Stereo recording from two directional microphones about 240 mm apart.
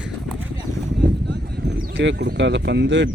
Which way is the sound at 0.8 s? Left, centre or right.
Right.